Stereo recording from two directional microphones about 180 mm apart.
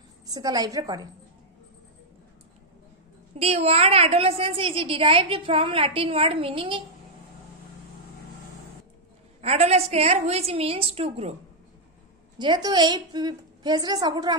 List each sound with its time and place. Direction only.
0.3 s a woman's voice: 20° right (ahead or behind)
3.3 s a woman's voice: 35° right (ahead or behind)
9.4 s a woman's voice: 35° right (ahead or behind)
12.4 s a woman's voice: 25° right (ahead or behind)